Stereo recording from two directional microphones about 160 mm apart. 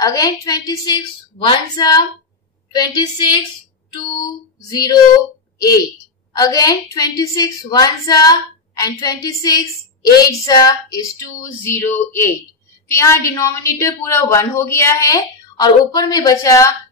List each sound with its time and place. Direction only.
0.0 s a woman's voice: 20° left (ahead or behind)
6.3 s a woman's voice: 25° left (ahead or behind)